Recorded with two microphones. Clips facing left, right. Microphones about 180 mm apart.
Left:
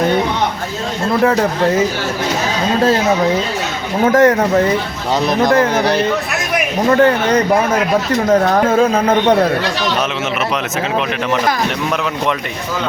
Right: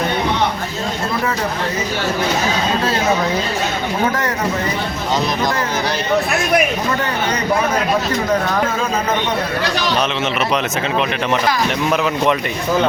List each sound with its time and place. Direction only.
4.1 s speech: 50° left (ahead or behind)
5.4 s speech: 55° left (ahead or behind)
8.6 s speech: 55° left (ahead or behind)